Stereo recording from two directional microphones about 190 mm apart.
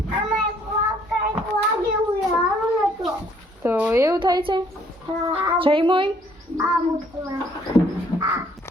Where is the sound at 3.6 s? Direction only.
10° right (ahead or behind); by 6.1 s 25° right (ahead or behind).